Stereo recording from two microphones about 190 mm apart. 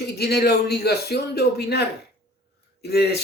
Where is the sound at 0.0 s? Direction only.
60° left (ahead or behind).